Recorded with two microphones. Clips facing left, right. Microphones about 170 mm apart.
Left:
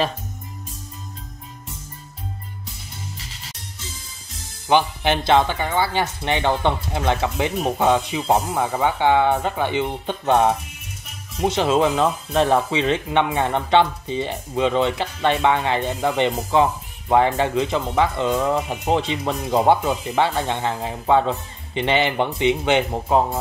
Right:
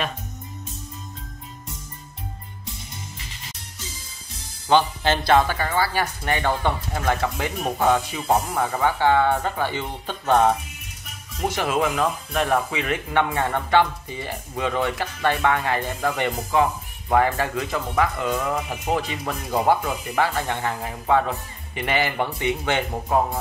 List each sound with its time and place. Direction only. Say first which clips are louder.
4.6 s speech: left 1 dB; 15° left (ahead or behind)